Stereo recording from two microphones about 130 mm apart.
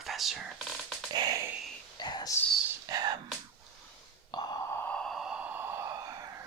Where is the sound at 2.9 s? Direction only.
30° right (ahead or behind).